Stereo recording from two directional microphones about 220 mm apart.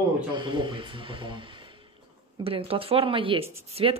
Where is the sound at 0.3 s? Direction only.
20° right (ahead or behind).